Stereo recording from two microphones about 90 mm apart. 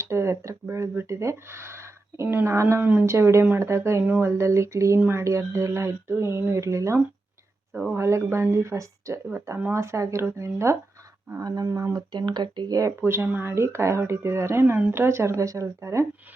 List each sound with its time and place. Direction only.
0.0 s speech: 30° right (ahead or behind)
2.5 s speech: 35° right (ahead or behind)
2.8 s speech: 15° right (ahead or behind)
3.1 s speech: 30° right (ahead or behind)
11.3 s speech: 45° right (ahead or behind)
12.1 s speech: 55° right (ahead or behind)
13.0 s speech: 25° right (ahead or behind)